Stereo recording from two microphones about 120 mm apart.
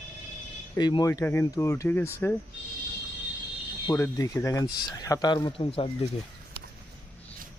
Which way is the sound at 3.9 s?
25° left (ahead or behind).